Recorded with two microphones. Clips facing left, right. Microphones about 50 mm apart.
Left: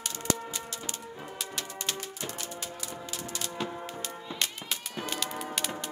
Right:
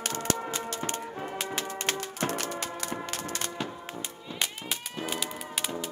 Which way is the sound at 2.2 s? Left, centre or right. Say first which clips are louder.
Right 7 dB; right.